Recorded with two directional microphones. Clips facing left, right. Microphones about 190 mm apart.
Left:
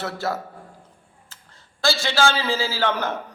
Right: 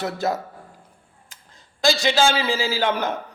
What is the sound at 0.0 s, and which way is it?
Speech, 20° right (ahead or behind).